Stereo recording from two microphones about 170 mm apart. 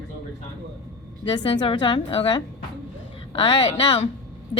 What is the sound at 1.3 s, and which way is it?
A woman's voice, 25° left (ahead or behind).